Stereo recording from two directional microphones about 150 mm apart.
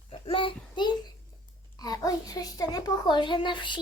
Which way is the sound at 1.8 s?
25° left (ahead or behind).